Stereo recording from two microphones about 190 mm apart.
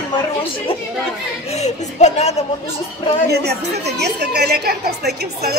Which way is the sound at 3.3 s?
60° right (ahead or behind).